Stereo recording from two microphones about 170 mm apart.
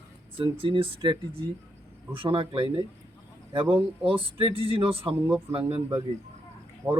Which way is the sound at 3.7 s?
30° right (ahead or behind).